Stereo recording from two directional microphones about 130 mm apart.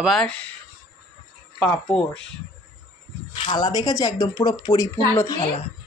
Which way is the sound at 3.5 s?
30° left (ahead or behind).